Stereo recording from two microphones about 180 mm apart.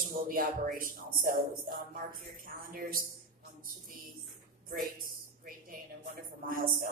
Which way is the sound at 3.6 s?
50° right (ahead or behind).